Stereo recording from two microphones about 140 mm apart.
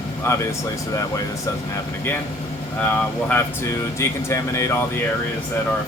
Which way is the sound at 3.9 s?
20° left (ahead or behind).